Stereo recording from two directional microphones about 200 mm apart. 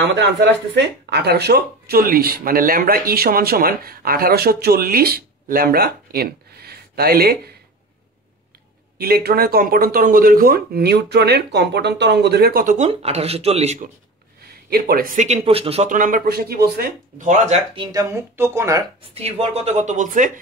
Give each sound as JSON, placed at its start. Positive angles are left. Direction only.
{"t": 0.0, "sound": "speech", "side_deg": -60}
{"t": 8.9, "sound": "speech", "side_deg": -50}
{"t": 14.7, "sound": "speech", "side_deg": -50}
{"t": 17.7, "sound": "speech", "side_deg": -15}
{"t": 19.1, "sound": "speech", "side_deg": -30}